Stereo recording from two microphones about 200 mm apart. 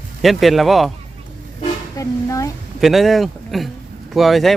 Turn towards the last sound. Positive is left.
turn(degrees=0)  # may be behind; listen again after turning